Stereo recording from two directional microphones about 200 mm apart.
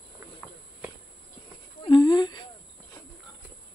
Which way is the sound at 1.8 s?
20° left (ahead or behind).